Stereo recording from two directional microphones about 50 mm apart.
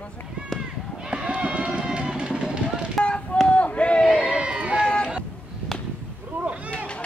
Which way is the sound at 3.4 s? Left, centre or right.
Left.